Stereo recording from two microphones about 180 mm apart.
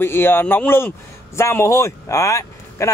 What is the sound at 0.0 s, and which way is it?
A man's voice, 10° left (ahead or behind).